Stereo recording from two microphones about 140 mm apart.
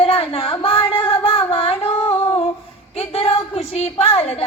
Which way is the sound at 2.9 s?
45° left (ahead or behind).